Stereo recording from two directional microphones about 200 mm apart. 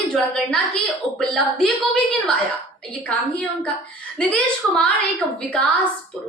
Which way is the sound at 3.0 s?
5° left (ahead or behind).